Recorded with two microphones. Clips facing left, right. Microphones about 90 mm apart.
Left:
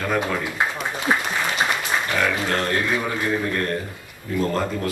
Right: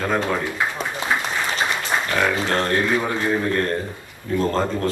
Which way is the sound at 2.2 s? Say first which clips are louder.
Right 2 dB; 25° right (ahead or behind).